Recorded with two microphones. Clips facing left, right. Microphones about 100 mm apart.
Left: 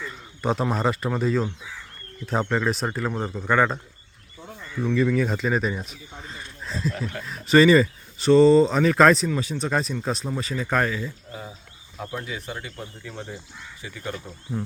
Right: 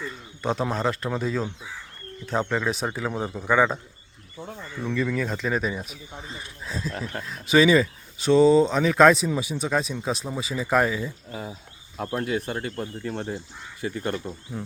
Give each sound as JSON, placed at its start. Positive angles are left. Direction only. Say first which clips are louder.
{"t": 0.4, "sound": "speech", "louder": "left 2 dB", "side_deg": 0}
{"t": 4.9, "sound": "speech", "louder": "left 4 dB", "side_deg": 5}
{"t": 11.9, "sound": "speech", "louder": "right 6 dB", "side_deg": -55}